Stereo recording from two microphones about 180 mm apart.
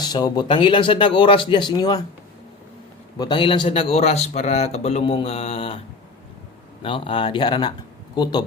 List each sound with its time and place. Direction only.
0.0 s speech: 20° left (ahead or behind)
3.2 s a man's voice: 25° left (ahead or behind)
6.8 s speech: 30° left (ahead or behind)